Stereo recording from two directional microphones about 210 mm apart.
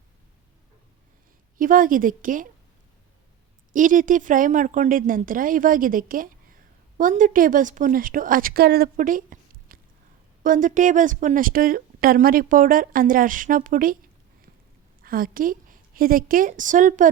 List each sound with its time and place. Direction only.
1.5 s a woman's voice: 40° right (ahead or behind)
3.7 s a woman's voice: 40° right (ahead or behind)
15.0 s a woman's voice: 45° right (ahead or behind)